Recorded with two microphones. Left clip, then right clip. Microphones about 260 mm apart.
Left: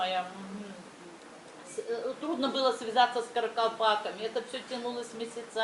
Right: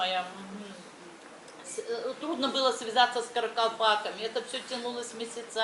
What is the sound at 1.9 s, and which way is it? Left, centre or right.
Speech, left.